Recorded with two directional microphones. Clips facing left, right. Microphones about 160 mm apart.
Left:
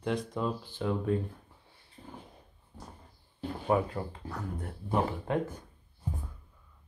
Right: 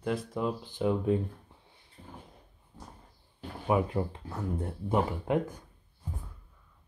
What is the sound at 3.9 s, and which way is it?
Speech, 25° right (ahead or behind).